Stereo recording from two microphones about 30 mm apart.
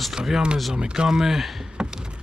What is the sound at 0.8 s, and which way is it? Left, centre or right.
Speech, right.